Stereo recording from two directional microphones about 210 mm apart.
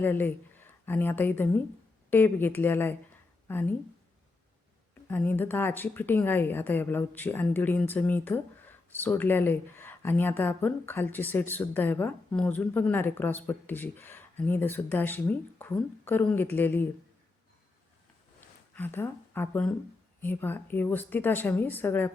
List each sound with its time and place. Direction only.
0.0 s a woman's voice: 10° left (ahead or behind)
5.0 s a woman's voice: 10° left (ahead or behind)
18.3 s a sound: 10° left (ahead or behind)
20.2 s a woman's voice: 10° left (ahead or behind)